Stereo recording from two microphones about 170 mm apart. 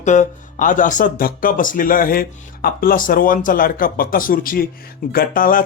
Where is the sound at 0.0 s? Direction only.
45° left (ahead or behind).